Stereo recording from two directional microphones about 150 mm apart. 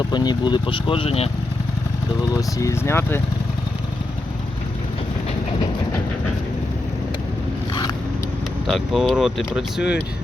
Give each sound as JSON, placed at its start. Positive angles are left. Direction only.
{"t": 0.1, "sound": "speech", "side_deg": 30}
{"t": 2.3, "sound": "speech", "side_deg": 20}
{"t": 8.6, "sound": "speech", "side_deg": 0}